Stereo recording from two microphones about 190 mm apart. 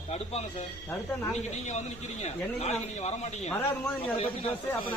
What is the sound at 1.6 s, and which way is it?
A man's voice, 35° left (ahead or behind).